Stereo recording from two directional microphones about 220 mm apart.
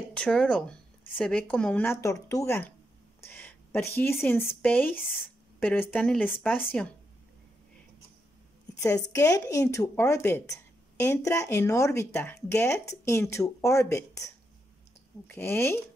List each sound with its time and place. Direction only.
0.1 s speech: 5° left (ahead or behind)
8.8 s speech: 15° left (ahead or behind)